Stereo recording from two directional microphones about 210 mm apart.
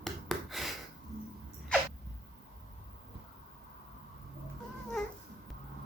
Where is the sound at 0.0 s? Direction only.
Centre (ahead or behind).